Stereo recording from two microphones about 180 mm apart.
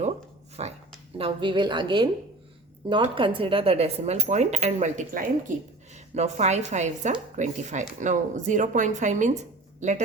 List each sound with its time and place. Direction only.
0.6 s a woman's voice: 35° right (ahead or behind)